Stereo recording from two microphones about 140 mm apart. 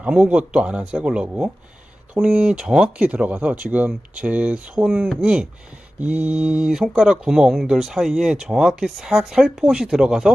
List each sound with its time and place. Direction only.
0.0 s speech: 10° right (ahead or behind)